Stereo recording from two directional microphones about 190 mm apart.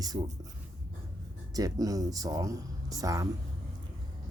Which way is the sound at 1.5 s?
20° right (ahead or behind).